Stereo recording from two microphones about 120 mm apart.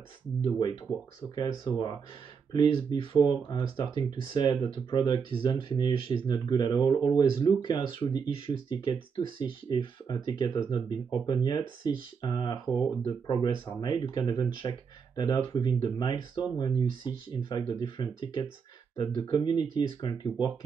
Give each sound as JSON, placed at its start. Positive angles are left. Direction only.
{"t": 1.3, "sound": "speech", "side_deg": 40}